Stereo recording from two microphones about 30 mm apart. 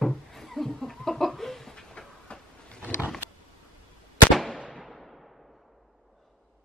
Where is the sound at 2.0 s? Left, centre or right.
Left.